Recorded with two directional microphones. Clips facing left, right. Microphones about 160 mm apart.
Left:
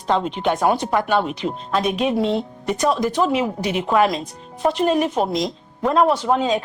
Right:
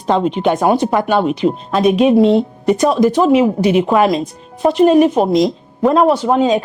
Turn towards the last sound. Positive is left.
turn(degrees=-10)  # may be behind; listen again after turning